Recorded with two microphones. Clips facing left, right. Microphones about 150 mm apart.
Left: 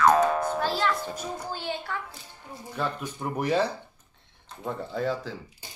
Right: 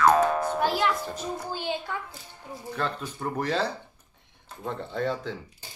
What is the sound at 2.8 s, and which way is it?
Speech, 15° left (ahead or behind).